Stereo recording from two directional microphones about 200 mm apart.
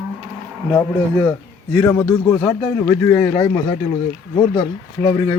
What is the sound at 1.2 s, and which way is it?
A man's voice, 10° left (ahead or behind).